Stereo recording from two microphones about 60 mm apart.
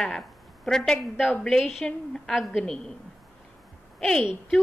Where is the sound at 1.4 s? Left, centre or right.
Centre.